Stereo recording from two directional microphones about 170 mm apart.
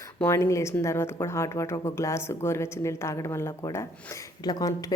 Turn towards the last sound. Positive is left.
turn(degrees=25)  # may be behind; listen again after turning